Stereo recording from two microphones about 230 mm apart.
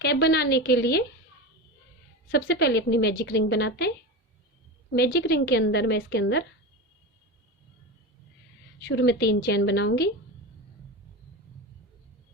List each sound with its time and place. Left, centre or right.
0.0 s a woman's voice: left
2.3 s a woman's voice: left
4.9 s a woman's voice: left
8.9 s a woman's voice: left